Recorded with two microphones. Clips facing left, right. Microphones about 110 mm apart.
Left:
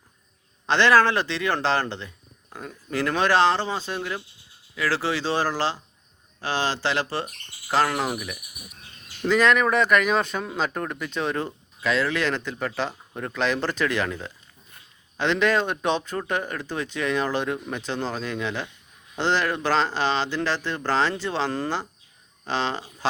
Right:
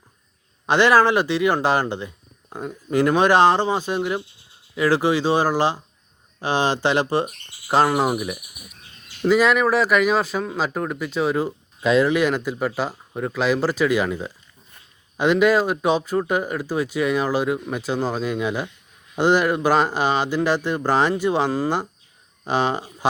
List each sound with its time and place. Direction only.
0.7 s speech: 15° right (ahead or behind)
9.2 s speech: 10° right (ahead or behind)
11.8 s speech: 20° right (ahead or behind)